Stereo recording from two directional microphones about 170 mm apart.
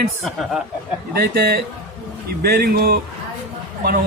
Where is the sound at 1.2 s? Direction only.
65° right (ahead or behind).